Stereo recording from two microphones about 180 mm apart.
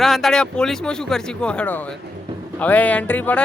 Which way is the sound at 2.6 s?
10° left (ahead or behind).